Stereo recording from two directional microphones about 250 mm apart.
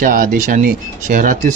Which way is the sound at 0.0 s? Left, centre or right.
Right.